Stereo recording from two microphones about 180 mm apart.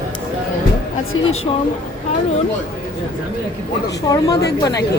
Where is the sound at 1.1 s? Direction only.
90° left.